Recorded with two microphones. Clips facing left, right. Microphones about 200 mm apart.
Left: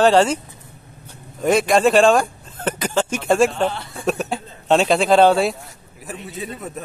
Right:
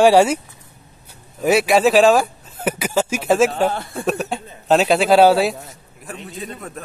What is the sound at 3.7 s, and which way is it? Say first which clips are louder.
Speech: right 5 dB; 55° right (ahead or behind).